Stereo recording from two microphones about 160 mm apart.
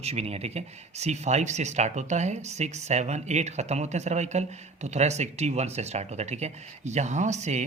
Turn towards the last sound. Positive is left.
turn(degrees=-45)  # may be behind; listen again after turning